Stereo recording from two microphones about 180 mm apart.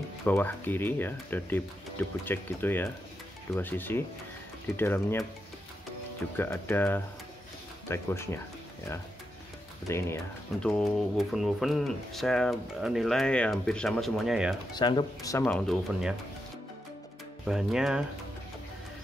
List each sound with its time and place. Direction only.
0.2 s speech: 10° left (ahead or behind)
6.3 s speech: 10° left (ahead or behind)
9.8 s speech: 15° left (ahead or behind); by 14.6 s 5° right (ahead or behind)
14.7 s speech: 25° left (ahead or behind)
15.3 s speech: 5° left (ahead or behind)
17.5 s speech: 5° right (ahead or behind)